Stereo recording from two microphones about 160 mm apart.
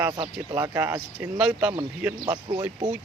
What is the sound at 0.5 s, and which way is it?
Speech, 15° right (ahead or behind).